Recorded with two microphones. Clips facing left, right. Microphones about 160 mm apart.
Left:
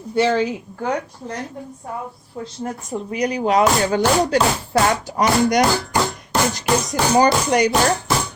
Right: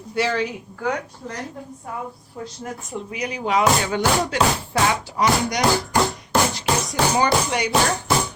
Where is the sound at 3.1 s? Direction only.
40° left (ahead or behind).